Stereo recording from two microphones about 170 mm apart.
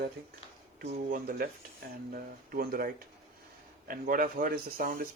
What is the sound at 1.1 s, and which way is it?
Speech, 55° right (ahead or behind).